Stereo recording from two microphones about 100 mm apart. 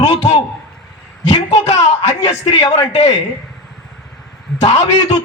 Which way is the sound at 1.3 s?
90° left.